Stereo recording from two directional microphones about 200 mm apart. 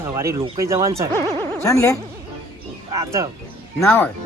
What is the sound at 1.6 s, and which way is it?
Speech, 15° left (ahead or behind).